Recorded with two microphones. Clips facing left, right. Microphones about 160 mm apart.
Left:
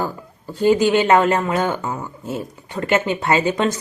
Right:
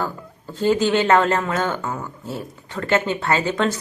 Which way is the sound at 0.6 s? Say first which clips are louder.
Left 3 dB; 15° left (ahead or behind).